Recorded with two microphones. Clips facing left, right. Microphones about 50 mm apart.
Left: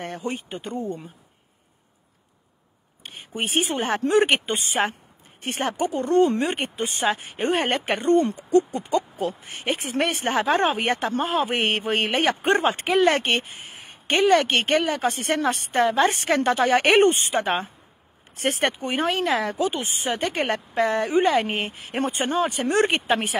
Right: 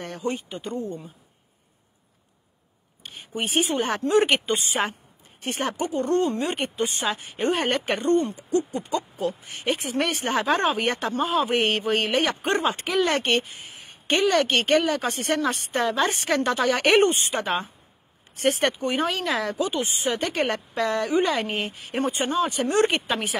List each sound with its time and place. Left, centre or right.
0.3 s speech: left
3.0 s speech: left